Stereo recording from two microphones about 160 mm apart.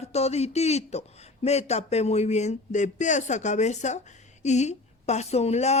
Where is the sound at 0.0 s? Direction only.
40° left (ahead or behind).